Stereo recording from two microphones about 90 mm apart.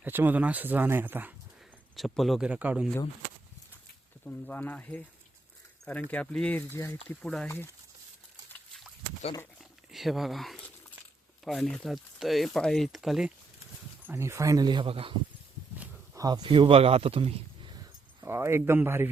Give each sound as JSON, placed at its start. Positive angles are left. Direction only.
{"t": 0.0, "sound": "speech", "side_deg": -20}
{"t": 2.0, "sound": "speech", "side_deg": 0}
{"t": 2.4, "sound": "speech", "side_deg": -15}
{"t": 4.3, "sound": "speech", "side_deg": 15}
{"t": 7.2, "sound": "speech", "side_deg": 5}
{"t": 7.4, "sound": "speech", "side_deg": 25}
{"t": 9.6, "sound": "speech", "side_deg": 0}
{"t": 14.1, "sound": "speech", "side_deg": -30}
{"t": 14.8, "sound": "speech", "side_deg": -90}
{"t": 16.1, "sound": "speech", "side_deg": -50}
{"t": 18.2, "sound": "speech", "side_deg": -30}